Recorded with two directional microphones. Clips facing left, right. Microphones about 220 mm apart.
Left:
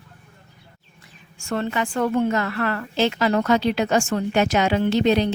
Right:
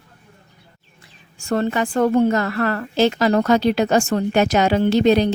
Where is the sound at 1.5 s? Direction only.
40° right (ahead or behind).